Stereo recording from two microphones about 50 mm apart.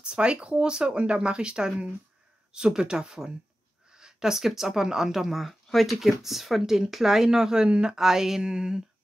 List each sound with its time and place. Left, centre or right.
0.0 s speech: right